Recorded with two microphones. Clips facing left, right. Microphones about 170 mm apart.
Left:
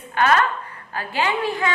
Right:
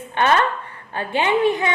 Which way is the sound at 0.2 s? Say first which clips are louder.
Right 1 dB; 25° right (ahead or behind).